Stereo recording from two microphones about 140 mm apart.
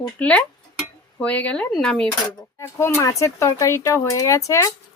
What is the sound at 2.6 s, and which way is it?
Speech, 20° left (ahead or behind).